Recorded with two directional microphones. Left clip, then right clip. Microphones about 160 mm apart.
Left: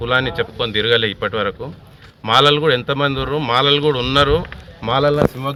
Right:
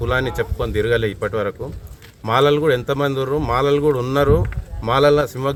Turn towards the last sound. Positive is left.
turn(degrees=-20)  # may be behind; listen again after turning